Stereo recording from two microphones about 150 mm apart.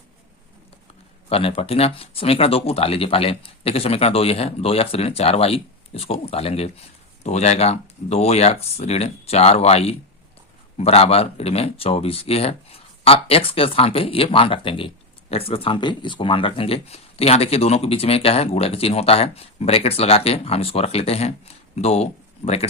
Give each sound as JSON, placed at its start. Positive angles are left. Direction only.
{"t": 1.3, "sound": "speech", "side_deg": 40}